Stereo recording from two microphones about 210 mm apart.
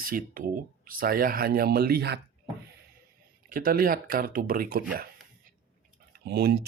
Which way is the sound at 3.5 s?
40° right (ahead or behind).